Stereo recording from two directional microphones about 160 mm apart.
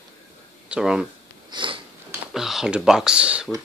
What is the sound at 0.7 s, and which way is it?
Speech, 5° right (ahead or behind).